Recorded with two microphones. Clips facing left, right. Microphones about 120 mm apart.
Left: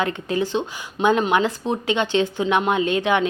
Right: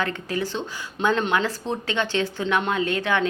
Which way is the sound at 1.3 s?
15° left (ahead or behind).